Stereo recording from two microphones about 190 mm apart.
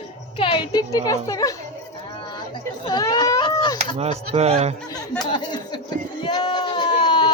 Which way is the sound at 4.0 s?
35° right (ahead or behind).